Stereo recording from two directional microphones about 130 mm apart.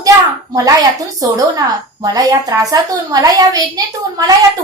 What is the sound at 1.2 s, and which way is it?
A woman's voice, 30° right (ahead or behind).